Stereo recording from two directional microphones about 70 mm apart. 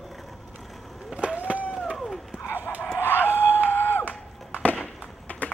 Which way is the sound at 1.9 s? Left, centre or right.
Centre.